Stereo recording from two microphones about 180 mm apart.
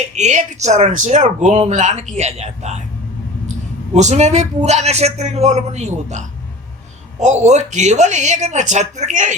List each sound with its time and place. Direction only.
0.1 s speech: 40° right (ahead or behind)
3.9 s speech: 40° right (ahead or behind)